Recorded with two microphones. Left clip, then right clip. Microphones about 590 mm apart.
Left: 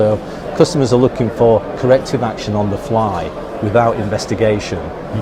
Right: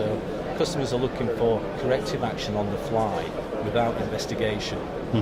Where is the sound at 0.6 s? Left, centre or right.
Left.